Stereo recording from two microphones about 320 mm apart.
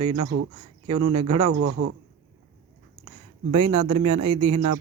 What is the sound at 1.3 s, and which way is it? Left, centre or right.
Speech, right.